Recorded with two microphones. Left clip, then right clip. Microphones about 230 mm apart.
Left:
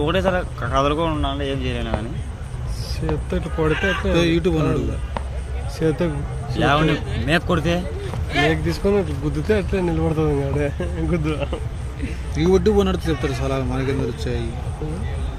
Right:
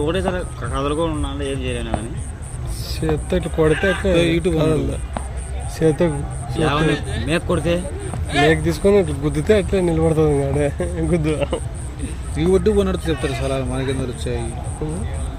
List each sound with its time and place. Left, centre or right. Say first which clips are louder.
0.0 s speech: left 1 dB; left
3.2 s speech: right 5 dB; right
3.7 s speech: right 1 dB; centre
5.8 s speech: right 4 dB; right
6.5 s a man's voice: left 2 dB; left
6.7 s speech: even; right
7.3 s speech: even; left
8.3 s speech: right 4 dB; right
8.6 s speech: right 4 dB; right
12.5 s speech: even; centre